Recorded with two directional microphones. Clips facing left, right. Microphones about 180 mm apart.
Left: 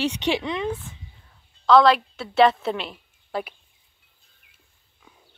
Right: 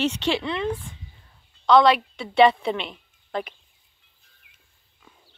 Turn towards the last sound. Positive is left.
turn(degrees=5)  # may be behind; listen again after turning